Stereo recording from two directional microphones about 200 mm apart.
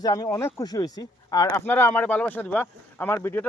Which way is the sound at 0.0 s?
15° left (ahead or behind).